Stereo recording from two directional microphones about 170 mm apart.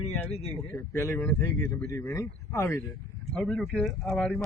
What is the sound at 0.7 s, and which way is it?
Speech, 15° left (ahead or behind).